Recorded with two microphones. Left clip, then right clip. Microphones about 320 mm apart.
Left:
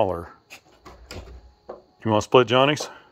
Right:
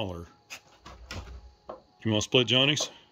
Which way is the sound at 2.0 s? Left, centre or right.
Centre.